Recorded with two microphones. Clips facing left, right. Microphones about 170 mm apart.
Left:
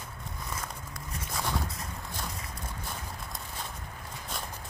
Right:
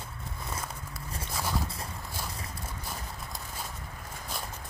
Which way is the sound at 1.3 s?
5° right (ahead or behind).